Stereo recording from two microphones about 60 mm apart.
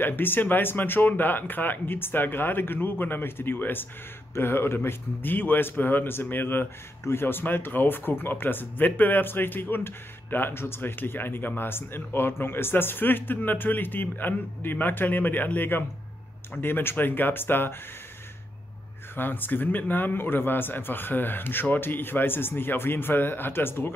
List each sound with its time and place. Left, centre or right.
0.0 s speech: left
19.1 s speech: left